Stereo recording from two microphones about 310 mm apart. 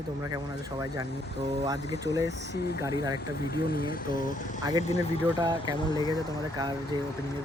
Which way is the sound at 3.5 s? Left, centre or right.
Left.